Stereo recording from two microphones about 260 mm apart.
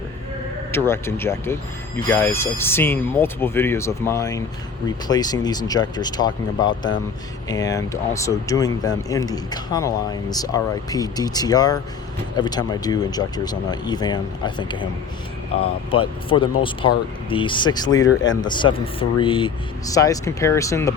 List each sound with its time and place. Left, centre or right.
0.7 s speech: centre